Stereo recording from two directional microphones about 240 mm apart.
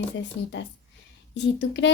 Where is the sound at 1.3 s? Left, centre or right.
Left.